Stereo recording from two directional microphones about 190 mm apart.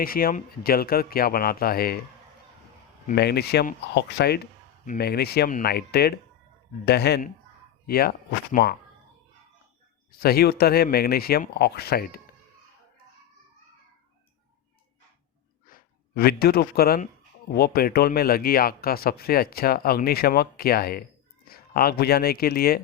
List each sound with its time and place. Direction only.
0.0 s speech: 50° left (ahead or behind)
3.1 s speech: 60° left (ahead or behind)
10.1 s speech: 55° left (ahead or behind)
15.6 s speech: 50° left (ahead or behind)